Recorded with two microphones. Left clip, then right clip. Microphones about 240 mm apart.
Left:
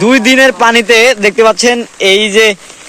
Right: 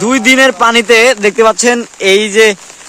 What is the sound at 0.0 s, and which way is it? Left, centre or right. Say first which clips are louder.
Speech: left 1 dB; centre.